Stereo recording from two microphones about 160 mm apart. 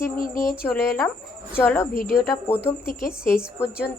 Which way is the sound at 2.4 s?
15° left (ahead or behind).